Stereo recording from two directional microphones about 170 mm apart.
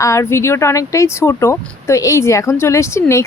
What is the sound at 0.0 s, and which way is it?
Speech, 15° left (ahead or behind).